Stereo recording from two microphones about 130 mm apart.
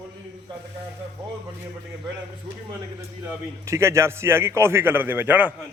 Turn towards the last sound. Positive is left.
turn(degrees=-15)  # may be behind; listen again after turning